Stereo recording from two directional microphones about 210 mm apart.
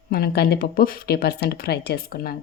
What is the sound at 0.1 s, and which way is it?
A woman's voice, 50° left (ahead or behind).